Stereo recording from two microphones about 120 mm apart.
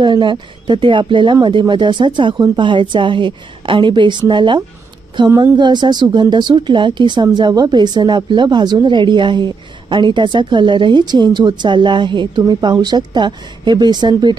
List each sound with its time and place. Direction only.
0.0 s a woman's voice: 40° right (ahead or behind)